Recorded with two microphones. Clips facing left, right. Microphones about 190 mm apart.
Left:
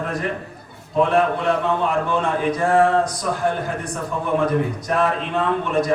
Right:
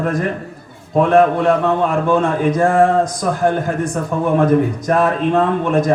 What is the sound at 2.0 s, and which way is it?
A man's voice, 45° right (ahead or behind).